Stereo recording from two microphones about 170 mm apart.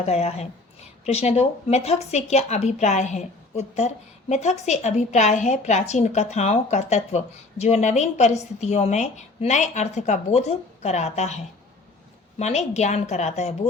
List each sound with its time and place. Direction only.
0.0 s a woman's voice: 35° left (ahead or behind)
12.4 s a woman's voice: 40° left (ahead or behind)